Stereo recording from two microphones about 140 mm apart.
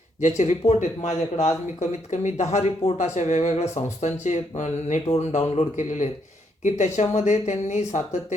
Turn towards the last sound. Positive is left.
turn(degrees=60)  # may be behind; listen again after turning